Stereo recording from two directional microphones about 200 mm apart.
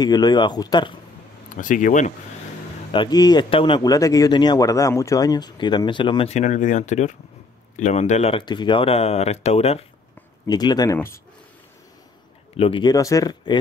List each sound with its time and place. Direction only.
0.0 s speech: 20° left (ahead or behind)
1.5 s speech: 40° left (ahead or behind)
2.9 s speech: 20° left (ahead or behind)
10.4 s speech: 20° left (ahead or behind)
12.5 s speech: 25° left (ahead or behind)